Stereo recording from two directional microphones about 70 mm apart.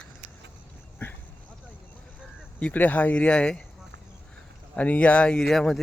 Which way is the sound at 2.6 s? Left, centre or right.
Left.